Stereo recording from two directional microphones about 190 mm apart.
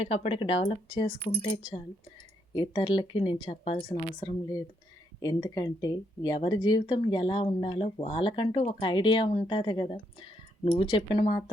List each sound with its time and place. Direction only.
0.0 s speech: 30° left (ahead or behind)
2.6 s speech: 25° left (ahead or behind)